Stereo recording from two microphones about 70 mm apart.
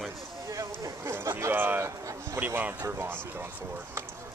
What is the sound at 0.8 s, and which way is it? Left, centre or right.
Speech, right.